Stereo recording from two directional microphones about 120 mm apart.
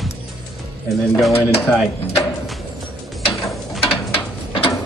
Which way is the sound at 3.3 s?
Centre (ahead or behind).